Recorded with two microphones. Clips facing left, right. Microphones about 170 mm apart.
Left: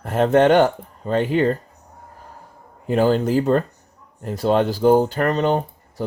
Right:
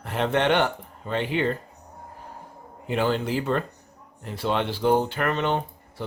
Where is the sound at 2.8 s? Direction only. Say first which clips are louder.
Left 7 dB; 40° left (ahead or behind).